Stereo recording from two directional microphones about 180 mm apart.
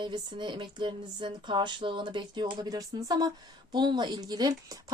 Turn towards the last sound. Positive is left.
turn(degrees=-20)  # may be behind; listen again after turning